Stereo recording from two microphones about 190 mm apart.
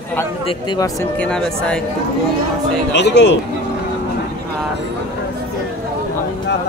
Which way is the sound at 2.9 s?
65° left (ahead or behind).